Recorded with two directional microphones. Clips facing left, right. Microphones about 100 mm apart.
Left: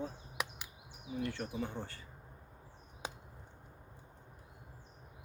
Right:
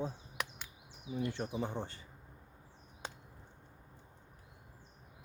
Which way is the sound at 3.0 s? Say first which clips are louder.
Left 2 dB; 10° left (ahead or behind).